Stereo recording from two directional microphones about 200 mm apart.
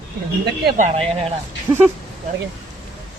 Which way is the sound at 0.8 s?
30° right (ahead or behind).